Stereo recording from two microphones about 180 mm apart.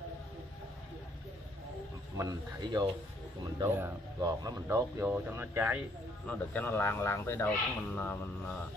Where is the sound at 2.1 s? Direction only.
20° right (ahead or behind).